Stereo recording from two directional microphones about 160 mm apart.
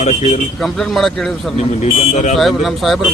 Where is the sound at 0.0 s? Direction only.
45° left (ahead or behind).